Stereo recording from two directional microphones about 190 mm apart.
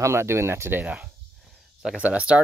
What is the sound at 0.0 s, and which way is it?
Speech, 15° right (ahead or behind).